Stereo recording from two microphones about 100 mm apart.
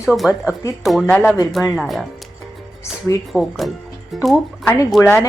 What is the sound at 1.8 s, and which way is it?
Speech, centre (ahead or behind).